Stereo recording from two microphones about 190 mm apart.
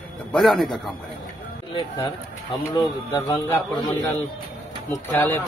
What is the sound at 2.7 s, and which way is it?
Speech, 20° left (ahead or behind).